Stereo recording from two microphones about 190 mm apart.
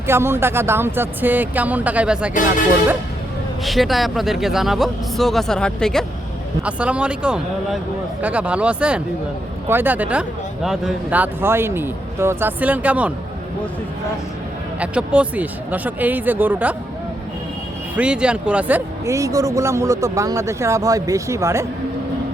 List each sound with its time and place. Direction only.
0.1 s speech: 15° right (ahead or behind)
3.6 s speech: centre (ahead or behind)
14.8 s speech: 5° right (ahead or behind)
17.9 s speech: 5° right (ahead or behind)